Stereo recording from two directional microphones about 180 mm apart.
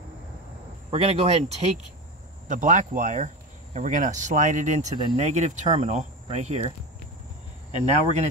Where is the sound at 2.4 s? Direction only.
45° right (ahead or behind).